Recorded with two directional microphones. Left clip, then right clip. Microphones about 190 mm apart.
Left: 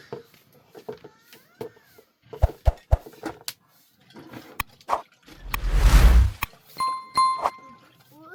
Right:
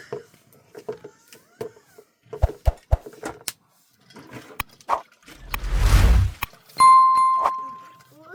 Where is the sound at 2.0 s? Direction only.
40° right (ahead or behind).